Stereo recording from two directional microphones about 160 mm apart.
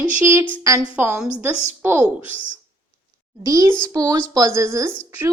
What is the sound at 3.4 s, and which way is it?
Speech, 20° right (ahead or behind).